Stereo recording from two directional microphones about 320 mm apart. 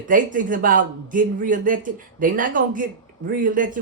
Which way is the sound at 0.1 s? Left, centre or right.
Right.